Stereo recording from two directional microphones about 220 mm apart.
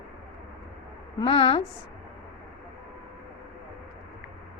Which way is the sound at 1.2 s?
25° left (ahead or behind).